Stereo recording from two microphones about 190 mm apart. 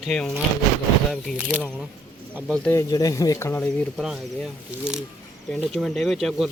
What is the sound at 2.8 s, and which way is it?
Speech, 15° left (ahead or behind).